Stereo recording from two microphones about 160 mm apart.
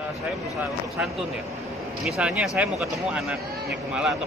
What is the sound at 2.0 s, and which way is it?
Speech, 5° right (ahead or behind).